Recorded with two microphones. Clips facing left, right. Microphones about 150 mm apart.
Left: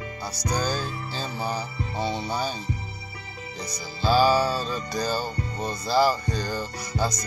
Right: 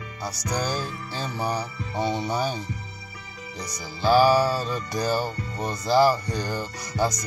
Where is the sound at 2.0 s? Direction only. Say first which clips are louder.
Right 3 dB; 20° right (ahead or behind).